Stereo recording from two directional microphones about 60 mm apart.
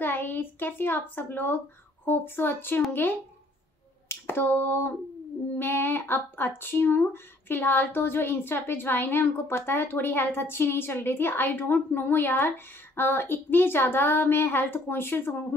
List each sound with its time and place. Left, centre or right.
0.0 s a woman's voice: left
4.1 s a sound: left
5.6 s speech: left